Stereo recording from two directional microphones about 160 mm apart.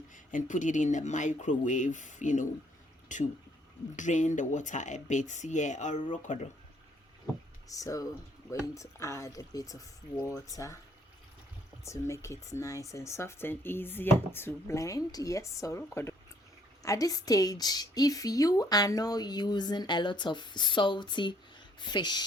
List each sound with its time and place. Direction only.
0.1 s speech: 55° left (ahead or behind)
7.7 s a woman's voice: 20° left (ahead or behind)
11.8 s a woman's voice: 20° left (ahead or behind)